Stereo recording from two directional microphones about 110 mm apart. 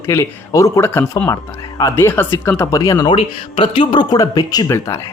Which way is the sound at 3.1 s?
50° left (ahead or behind).